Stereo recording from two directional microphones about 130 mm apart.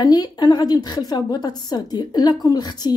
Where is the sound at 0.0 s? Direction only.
30° left (ahead or behind).